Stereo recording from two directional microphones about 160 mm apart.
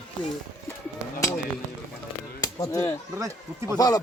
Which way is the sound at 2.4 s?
20° left (ahead or behind).